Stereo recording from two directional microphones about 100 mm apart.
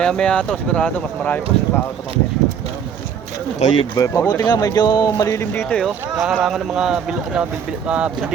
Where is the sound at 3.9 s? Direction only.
30° left (ahead or behind).